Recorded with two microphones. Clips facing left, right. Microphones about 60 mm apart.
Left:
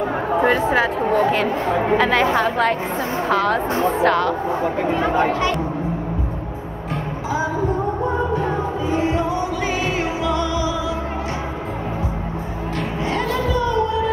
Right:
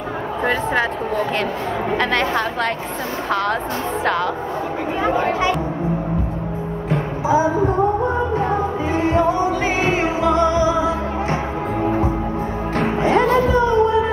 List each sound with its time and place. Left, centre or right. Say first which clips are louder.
0.4 s speech: left 2 dB; centre
7.2 s music: right 7 dB; right
8.9 s music: right 4 dB; right
12.7 s music: right 7 dB; right